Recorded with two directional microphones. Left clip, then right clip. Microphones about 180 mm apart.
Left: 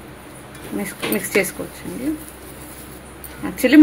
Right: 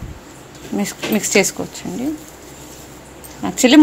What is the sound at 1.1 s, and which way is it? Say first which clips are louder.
Speech: right 4 dB; 45° right (ahead or behind).